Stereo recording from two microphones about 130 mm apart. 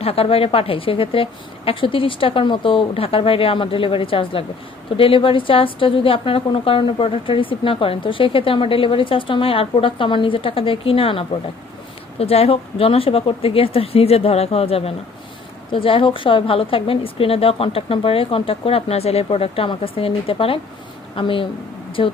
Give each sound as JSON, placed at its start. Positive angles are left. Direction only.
{"t": 0.0, "sound": "a woman's voice", "side_deg": 50}